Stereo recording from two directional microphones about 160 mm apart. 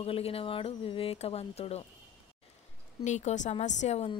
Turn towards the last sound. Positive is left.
turn(degrees=40)  # may be behind; listen again after turning